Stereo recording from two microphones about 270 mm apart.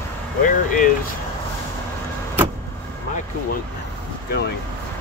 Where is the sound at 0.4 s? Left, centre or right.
Left.